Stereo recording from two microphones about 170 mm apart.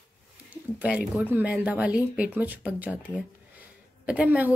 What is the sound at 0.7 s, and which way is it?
A woman's voice, 5° right (ahead or behind).